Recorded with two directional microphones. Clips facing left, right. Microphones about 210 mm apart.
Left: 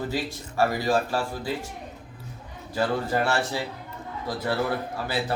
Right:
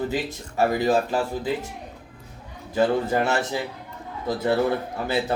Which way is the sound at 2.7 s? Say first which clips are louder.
Right 4 dB; 20° right (ahead or behind).